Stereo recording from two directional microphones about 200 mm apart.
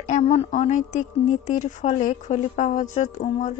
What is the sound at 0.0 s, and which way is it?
A woman's voice, 35° left (ahead or behind).